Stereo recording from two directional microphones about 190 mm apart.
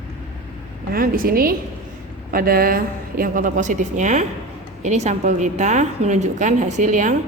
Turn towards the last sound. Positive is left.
turn(degrees=-40)  # may be behind; listen again after turning